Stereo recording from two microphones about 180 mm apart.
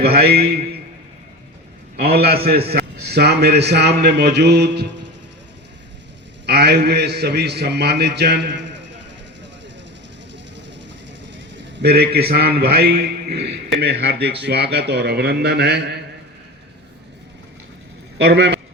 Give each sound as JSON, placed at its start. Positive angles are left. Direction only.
{"t": 0.0, "sound": "a man's voice", "side_deg": -60}
{"t": 2.1, "sound": "a man's voice", "side_deg": -60}
{"t": 6.4, "sound": "a man's voice", "side_deg": -65}
{"t": 11.3, "sound": "a sound", "side_deg": -90}
{"t": 12.3, "sound": "a man's voice", "side_deg": -60}
{"t": 18.3, "sound": "a man's voice", "side_deg": -70}